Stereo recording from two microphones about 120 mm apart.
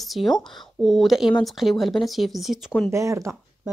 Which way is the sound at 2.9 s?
25° right (ahead or behind).